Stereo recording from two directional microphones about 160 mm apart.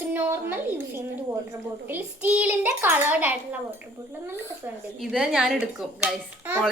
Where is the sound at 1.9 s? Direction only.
10° right (ahead or behind).